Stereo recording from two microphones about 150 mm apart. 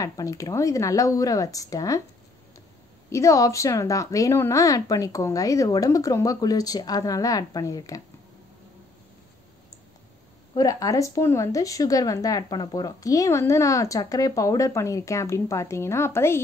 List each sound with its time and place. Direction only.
0.0 s speech: 20° left (ahead or behind)
3.1 s speech: 20° left (ahead or behind)
10.5 s speech: 25° left (ahead or behind)